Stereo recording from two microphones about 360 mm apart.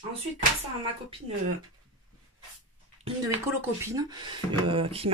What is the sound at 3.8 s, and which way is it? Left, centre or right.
Speech, centre.